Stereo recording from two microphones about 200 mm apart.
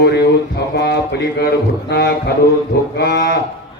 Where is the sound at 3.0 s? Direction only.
55° left (ahead or behind).